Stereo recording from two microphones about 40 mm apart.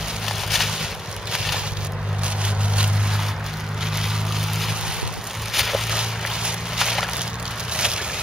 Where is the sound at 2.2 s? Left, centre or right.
Right.